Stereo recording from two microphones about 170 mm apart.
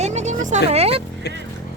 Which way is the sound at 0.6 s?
35° right (ahead or behind).